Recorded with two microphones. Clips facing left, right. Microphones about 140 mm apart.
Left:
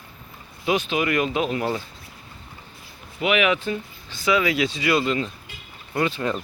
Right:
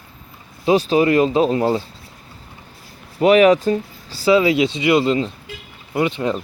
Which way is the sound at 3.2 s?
40° right (ahead or behind).